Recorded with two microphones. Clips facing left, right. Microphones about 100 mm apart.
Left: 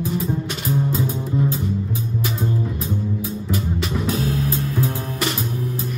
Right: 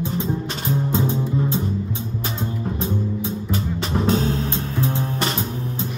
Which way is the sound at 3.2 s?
30° right (ahead or behind).